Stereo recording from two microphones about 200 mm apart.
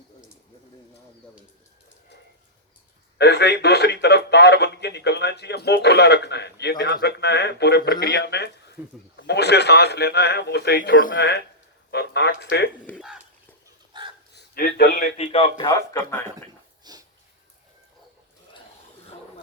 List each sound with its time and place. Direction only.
3.2 s speech: 55° left (ahead or behind)
8.8 s speech: 5° right (ahead or behind)
9.1 s speech: 55° left (ahead or behind)
12.8 s speech: 10° left (ahead or behind)
13.9 s a sound: 25° right (ahead or behind)
14.3 s a man's voice: 50° left (ahead or behind)
15.3 s speech: 25° left (ahead or behind)
16.8 s a sound: 20° right (ahead or behind)